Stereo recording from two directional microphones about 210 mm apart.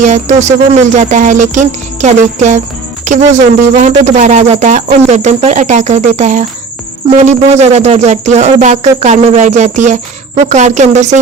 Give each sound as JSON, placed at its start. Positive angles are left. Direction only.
{"t": 0.0, "sound": "speech", "side_deg": -35}
{"t": 3.0, "sound": "music", "side_deg": -35}
{"t": 3.8, "sound": "speech", "side_deg": -35}